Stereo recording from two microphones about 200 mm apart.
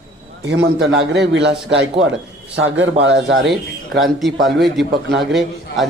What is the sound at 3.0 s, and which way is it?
Speech, 60° right (ahead or behind).